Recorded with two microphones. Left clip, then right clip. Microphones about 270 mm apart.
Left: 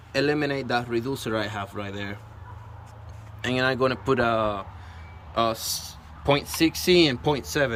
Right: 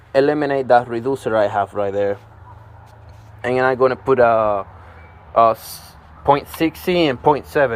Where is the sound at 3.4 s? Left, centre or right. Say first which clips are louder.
Right 8 dB; centre.